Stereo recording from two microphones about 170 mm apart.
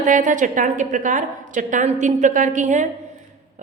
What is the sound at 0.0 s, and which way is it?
Speech, 50° right (ahead or behind).